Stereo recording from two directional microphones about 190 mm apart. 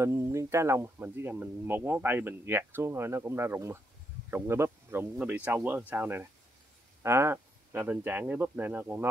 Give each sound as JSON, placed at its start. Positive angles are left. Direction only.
{"t": 0.0, "sound": "speech", "side_deg": -15}